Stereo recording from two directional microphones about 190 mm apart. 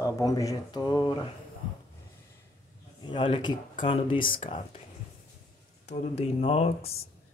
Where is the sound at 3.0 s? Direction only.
25° left (ahead or behind).